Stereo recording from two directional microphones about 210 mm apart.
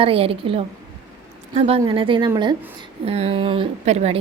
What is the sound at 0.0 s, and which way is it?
A woman's voice, 25° right (ahead or behind).